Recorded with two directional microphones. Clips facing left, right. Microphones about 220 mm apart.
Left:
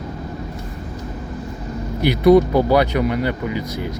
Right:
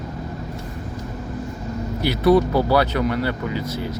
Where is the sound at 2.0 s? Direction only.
15° left (ahead or behind).